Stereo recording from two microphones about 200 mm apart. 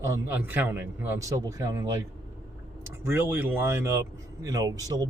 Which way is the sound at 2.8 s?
10° right (ahead or behind).